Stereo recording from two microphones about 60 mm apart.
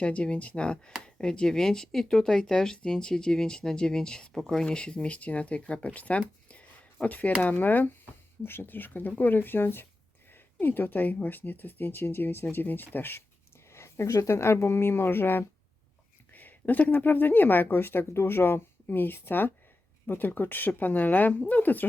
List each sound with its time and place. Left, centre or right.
0.0 s speech: left
13.7 s speech: left